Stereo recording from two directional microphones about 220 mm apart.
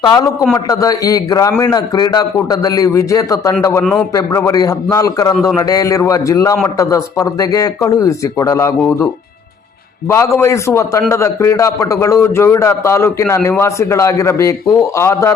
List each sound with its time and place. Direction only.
0.0 s a man's voice: 20° left (ahead or behind)
5.3 s a man's voice: centre (ahead or behind)
5.5 s a man's voice: 15° left (ahead or behind)
10.1 s a man's voice: 10° left (ahead or behind)